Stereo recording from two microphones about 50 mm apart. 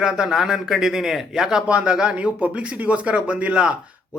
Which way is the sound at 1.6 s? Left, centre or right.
Right.